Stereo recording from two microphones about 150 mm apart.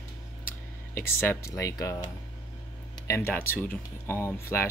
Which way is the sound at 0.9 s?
15° left (ahead or behind).